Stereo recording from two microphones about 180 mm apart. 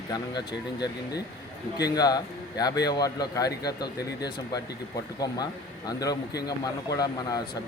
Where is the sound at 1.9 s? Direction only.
20° left (ahead or behind).